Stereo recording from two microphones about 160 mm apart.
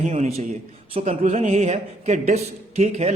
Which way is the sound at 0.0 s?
45° right (ahead or behind).